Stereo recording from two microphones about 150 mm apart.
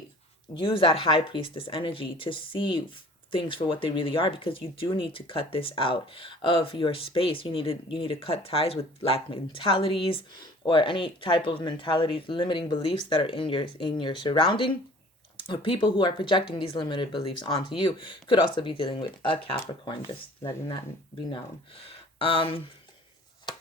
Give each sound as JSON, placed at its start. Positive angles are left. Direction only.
{"t": 0.5, "sound": "speech", "side_deg": 35}
{"t": 22.2, "sound": "speech", "side_deg": 35}
{"t": 23.5, "sound": "a sound", "side_deg": 30}